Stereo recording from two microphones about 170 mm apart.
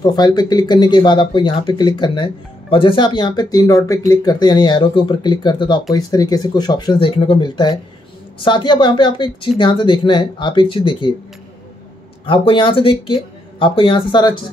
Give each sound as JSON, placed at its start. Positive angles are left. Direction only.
{"t": 0.0, "sound": "speech", "side_deg": 25}
{"t": 12.3, "sound": "speech", "side_deg": 30}